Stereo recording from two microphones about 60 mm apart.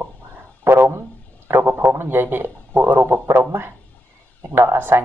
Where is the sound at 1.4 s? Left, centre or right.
Right.